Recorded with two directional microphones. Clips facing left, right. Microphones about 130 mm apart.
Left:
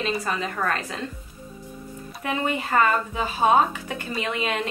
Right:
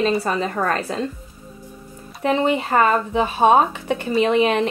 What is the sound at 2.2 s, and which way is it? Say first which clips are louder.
Speech: right 8 dB; 25° right (ahead or behind).